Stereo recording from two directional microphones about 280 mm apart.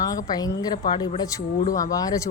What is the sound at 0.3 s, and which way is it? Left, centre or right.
Speech, centre.